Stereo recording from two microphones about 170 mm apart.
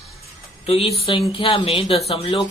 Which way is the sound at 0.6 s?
35° left (ahead or behind).